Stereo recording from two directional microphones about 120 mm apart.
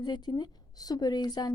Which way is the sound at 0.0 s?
35° left (ahead or behind).